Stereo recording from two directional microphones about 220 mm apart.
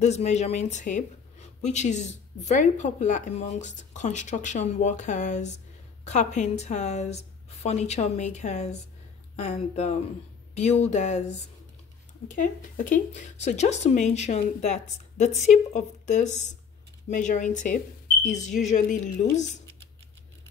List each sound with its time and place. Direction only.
0.0 s speech: 30° left (ahead or behind)